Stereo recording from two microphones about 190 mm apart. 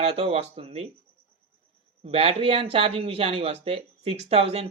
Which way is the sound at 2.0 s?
35° right (ahead or behind).